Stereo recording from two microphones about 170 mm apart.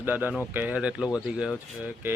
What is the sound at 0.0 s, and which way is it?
Speech, 10° right (ahead or behind).